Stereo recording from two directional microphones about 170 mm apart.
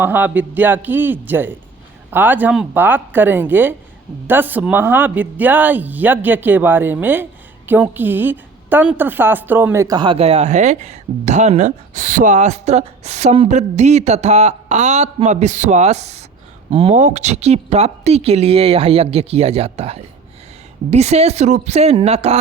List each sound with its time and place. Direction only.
0.0 s a woman's voice: 10° right (ahead or behind); by 22.4 s 40° right (ahead or behind)